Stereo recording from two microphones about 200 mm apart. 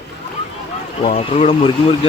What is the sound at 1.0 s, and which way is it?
Speech, 35° left (ahead or behind).